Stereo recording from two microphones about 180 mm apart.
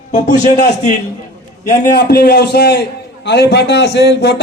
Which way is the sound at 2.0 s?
65° left (ahead or behind).